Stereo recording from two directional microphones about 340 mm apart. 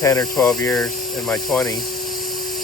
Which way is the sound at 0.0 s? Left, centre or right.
Centre.